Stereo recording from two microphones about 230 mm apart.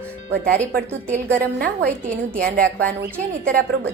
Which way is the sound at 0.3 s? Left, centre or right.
Right.